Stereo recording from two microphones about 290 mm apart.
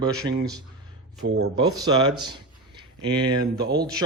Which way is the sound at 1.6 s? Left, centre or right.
Centre.